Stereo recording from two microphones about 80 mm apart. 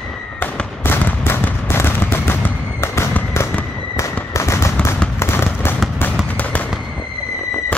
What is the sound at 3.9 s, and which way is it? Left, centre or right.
Fireworks, left.